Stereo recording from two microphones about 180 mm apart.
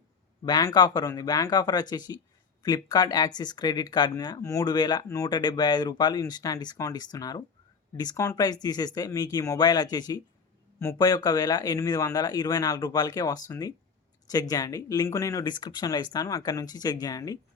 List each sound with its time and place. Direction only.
0.4 s speech: 20° left (ahead or behind)